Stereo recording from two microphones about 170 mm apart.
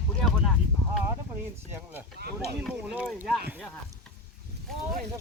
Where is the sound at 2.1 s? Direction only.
70° right (ahead or behind).